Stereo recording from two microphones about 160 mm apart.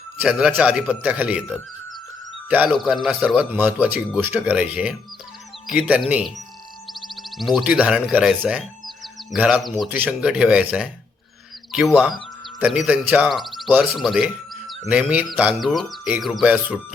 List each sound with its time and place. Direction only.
0.2 s speech: 5° right (ahead or behind)
7.0 s music: centre (ahead or behind)
7.6 s speech: 10° right (ahead or behind)
12.5 s speech: 5° right (ahead or behind)